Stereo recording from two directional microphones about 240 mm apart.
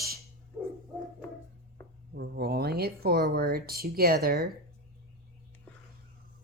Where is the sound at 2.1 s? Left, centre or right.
Right.